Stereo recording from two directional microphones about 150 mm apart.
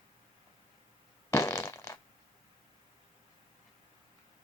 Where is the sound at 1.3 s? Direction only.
15° left (ahead or behind).